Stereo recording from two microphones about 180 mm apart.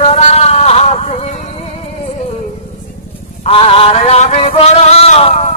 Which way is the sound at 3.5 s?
30° left (ahead or behind).